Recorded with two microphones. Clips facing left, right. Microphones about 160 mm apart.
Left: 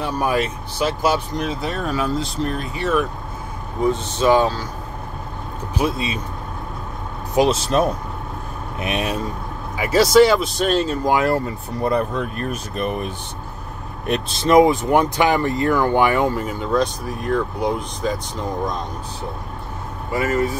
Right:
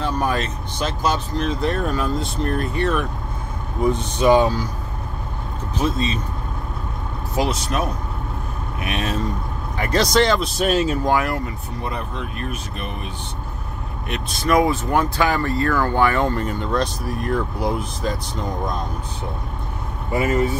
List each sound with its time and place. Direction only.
0.0 s speech: 10° left (ahead or behind)
3.9 s speech: 15° right (ahead or behind)
5.8 s speech: 10° left (ahead or behind)
7.3 s speech: 25° left (ahead or behind)
8.8 s speech: 15° left (ahead or behind)
9.8 s speech: 5° left (ahead or behind)
10.6 s speech: 5° right (ahead or behind)
11.2 s speech: 30° left (ahead or behind)
11.8 s speech: 45° left (ahead or behind)
14.3 s speech: 25° left (ahead or behind); by 18.8 s centre (ahead or behind)
20.1 s speech: 20° right (ahead or behind)